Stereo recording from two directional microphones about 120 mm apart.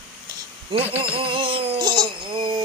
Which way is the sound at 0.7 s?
45° right (ahead or behind).